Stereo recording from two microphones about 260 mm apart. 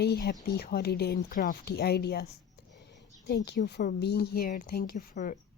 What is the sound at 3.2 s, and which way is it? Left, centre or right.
A woman's voice, left.